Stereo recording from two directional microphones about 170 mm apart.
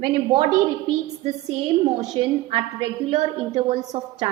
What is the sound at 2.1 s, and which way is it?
A woman's voice, 30° right (ahead or behind).